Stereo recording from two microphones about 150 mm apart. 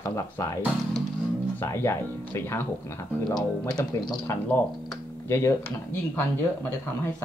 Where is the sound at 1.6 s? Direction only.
15° left (ahead or behind).